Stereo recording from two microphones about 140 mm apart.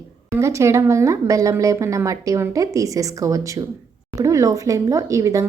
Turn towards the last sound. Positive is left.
turn(degrees=-20)  # may be behind; listen again after turning